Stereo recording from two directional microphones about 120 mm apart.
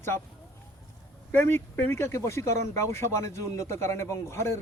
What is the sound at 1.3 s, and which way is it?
Speech, 20° left (ahead or behind).